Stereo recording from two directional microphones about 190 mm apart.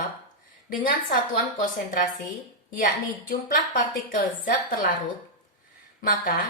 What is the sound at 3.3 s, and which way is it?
A woman's voice, 45° left (ahead or behind).